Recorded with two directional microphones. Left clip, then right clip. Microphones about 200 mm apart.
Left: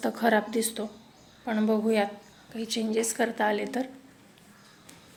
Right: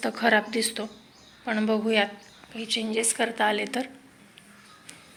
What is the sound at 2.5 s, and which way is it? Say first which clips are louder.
A woman's voice: right 2 dB; 25° left (ahead or behind).